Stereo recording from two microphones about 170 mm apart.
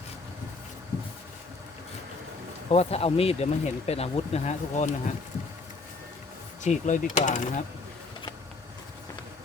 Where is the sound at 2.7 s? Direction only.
35° left (ahead or behind).